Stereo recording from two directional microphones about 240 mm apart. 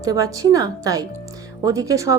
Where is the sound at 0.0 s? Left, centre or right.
Centre.